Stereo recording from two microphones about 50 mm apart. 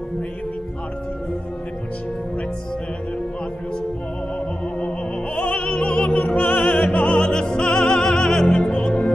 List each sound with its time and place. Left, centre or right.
4.7 s music: left
6.7 s opera: left